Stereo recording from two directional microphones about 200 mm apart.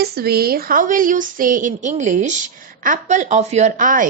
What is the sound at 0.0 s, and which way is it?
A woman's voice, 50° right (ahead or behind).